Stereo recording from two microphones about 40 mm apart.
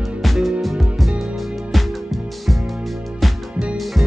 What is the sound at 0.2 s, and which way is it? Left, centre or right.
Music, centre.